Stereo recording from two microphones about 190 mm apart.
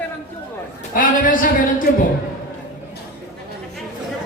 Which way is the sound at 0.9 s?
45° left (ahead or behind).